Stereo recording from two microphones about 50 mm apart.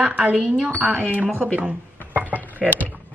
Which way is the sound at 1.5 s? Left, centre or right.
Right.